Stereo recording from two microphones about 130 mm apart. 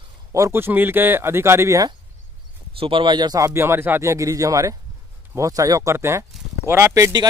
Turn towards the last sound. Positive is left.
turn(degrees=-25)  # may be behind; listen again after turning